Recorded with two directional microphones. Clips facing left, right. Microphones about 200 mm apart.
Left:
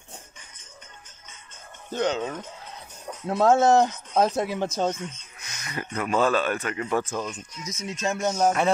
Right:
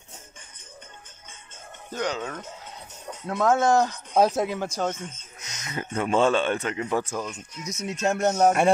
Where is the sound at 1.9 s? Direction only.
25° left (ahead or behind).